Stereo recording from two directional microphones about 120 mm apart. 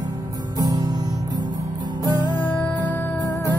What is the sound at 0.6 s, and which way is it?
Music, 35° right (ahead or behind).